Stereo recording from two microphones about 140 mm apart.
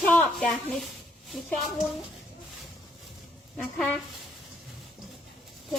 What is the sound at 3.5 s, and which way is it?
Speech, 5° left (ahead or behind).